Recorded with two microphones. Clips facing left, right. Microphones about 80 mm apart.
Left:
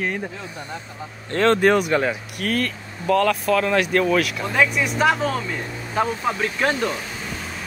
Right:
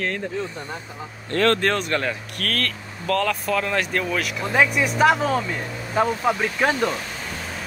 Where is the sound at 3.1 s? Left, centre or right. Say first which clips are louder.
Left 4 dB; centre.